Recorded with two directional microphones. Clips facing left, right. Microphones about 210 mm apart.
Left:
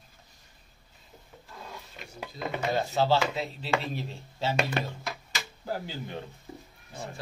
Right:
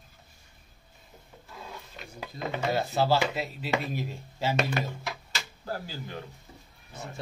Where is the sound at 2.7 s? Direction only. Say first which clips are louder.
Even; 5° right (ahead or behind).